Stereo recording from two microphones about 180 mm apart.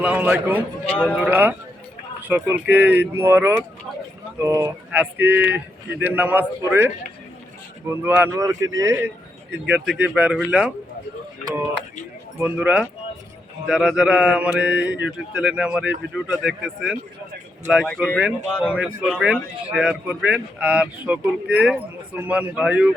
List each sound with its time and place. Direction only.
0.0 s speech: 5° right (ahead or behind)
9.6 s speech: 5° right (ahead or behind)
12.4 s speech: 10° right (ahead or behind)